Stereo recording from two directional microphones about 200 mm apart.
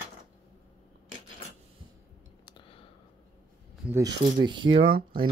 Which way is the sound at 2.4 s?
25° left (ahead or behind).